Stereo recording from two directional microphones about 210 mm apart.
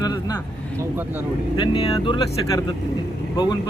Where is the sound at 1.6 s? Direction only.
25° left (ahead or behind).